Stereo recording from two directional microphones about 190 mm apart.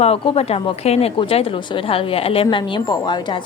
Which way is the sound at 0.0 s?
30° left (ahead or behind).